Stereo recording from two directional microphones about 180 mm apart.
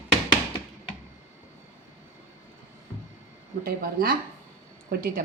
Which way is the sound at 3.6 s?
55° right (ahead or behind).